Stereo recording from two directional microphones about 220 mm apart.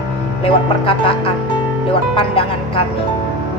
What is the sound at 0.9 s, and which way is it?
Music, 25° left (ahead or behind).